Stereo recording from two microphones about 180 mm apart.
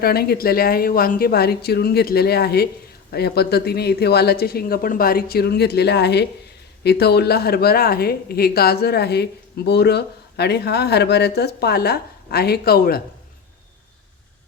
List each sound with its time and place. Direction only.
0.0 s speech: 60° left (ahead or behind)